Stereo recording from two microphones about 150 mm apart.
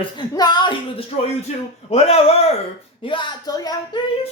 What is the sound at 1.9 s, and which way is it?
Speech, 40° left (ahead or behind).